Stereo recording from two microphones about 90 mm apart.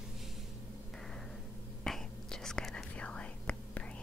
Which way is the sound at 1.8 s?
5° left (ahead or behind).